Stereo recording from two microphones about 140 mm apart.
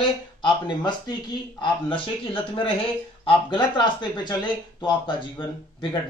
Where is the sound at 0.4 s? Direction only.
35° left (ahead or behind).